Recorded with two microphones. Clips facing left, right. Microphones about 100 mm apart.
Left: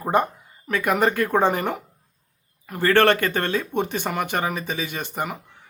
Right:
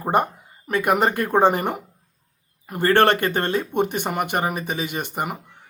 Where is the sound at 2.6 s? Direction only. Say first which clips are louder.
Right 1 dB; 20° right (ahead or behind).